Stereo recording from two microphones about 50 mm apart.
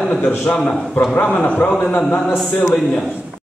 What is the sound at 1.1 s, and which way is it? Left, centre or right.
Speech, left.